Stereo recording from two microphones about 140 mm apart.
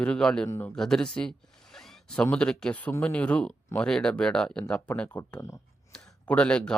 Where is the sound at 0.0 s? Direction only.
5° left (ahead or behind).